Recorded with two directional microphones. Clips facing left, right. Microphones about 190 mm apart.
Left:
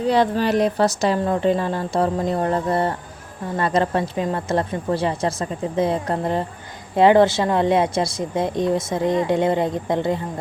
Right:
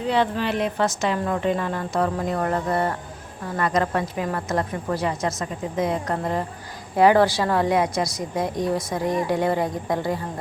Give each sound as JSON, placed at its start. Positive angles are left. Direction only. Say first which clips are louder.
{"t": 0.1, "sound": "speech", "louder": "left 4 dB", "side_deg": 40}